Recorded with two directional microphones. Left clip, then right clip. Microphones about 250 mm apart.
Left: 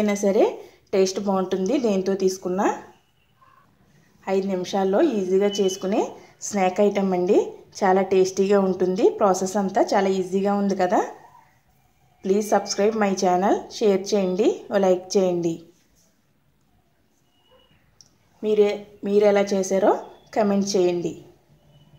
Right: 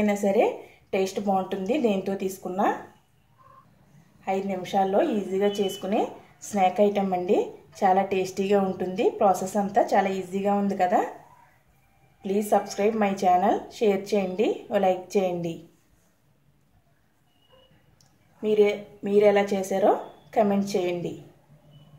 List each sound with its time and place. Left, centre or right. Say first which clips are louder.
0.0 s a woman's voice: left 2 dB; left
4.2 s a woman's voice: left 4 dB; left
12.2 s a woman's voice: left 3 dB; left
18.4 s a woman's voice: left 2 dB; centre